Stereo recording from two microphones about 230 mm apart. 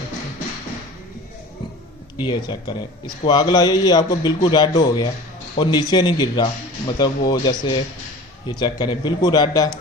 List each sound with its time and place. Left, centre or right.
2.2 s a man's voice: centre